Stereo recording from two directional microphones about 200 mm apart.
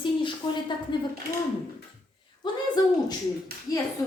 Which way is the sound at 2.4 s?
20° left (ahead or behind).